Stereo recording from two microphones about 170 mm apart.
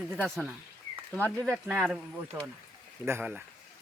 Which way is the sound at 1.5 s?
5° right (ahead or behind).